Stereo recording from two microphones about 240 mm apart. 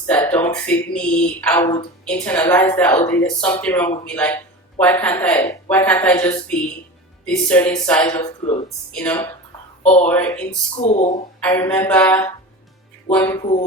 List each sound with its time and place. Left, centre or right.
0.1 s a woman's voice: centre
9.8 s speech: left
10.1 s a woman's voice: centre
10.8 s speech: left
11.3 s a woman's voice: centre